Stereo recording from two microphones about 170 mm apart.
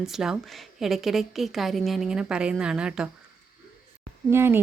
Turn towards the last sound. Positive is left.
turn(degrees=-15)  # may be behind; listen again after turning